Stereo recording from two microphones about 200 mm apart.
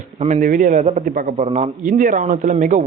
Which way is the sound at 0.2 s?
40° right (ahead or behind).